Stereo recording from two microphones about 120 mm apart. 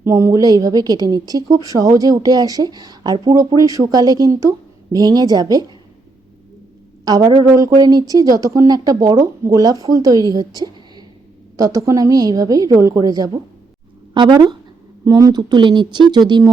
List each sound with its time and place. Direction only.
0.0 s a woman's voice: 20° right (ahead or behind)
7.0 s speech: 35° right (ahead or behind)
7.4 s a sound: 30° right (ahead or behind)
7.7 s a woman's voice: 35° right (ahead or behind)